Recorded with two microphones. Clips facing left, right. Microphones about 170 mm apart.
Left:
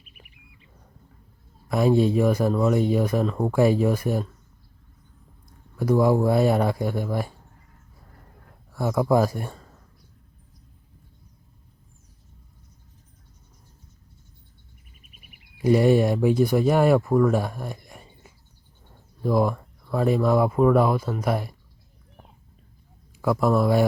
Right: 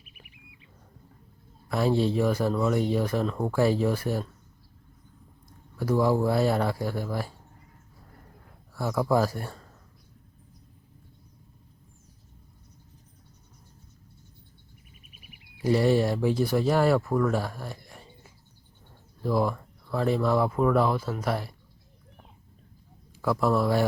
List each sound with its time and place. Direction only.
1.7 s speech: 15° left (ahead or behind)
5.7 s speech: 15° left (ahead or behind)
8.7 s speech: 15° left (ahead or behind)
15.6 s speech: 15° left (ahead or behind)
19.2 s speech: 15° left (ahead or behind)
23.2 s speech: 15° left (ahead or behind)